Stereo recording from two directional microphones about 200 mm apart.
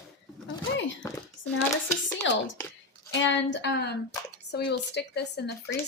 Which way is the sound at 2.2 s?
70° left (ahead or behind).